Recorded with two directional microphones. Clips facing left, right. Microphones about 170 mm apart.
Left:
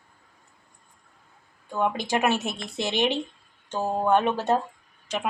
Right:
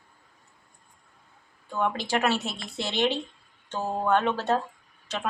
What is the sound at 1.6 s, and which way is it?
Speech, 15° left (ahead or behind).